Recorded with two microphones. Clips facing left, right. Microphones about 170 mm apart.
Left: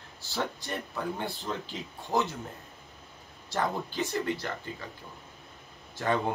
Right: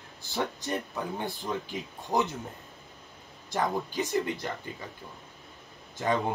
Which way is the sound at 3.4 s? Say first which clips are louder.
Right 1 dB; 15° right (ahead or behind).